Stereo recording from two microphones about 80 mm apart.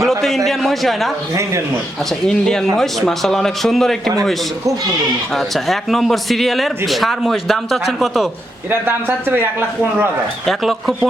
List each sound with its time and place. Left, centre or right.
0.0 s a man's voice: centre
2.2 s a man's voice: centre
5.3 s a man's voice: centre
8.7 s a man's voice: right
10.4 s a man's voice: centre